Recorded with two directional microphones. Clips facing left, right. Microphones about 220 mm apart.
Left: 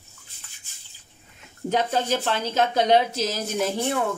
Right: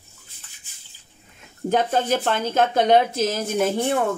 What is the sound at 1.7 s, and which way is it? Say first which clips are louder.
Speech: right 3 dB; 50° right (ahead or behind).